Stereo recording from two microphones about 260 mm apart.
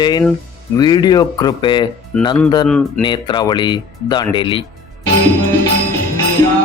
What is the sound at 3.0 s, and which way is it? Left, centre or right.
Speech, centre.